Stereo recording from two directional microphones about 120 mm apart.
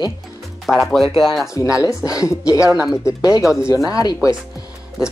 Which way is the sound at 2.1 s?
30° left (ahead or behind).